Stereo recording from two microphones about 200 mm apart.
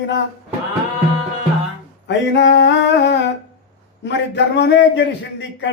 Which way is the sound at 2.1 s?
60° left (ahead or behind).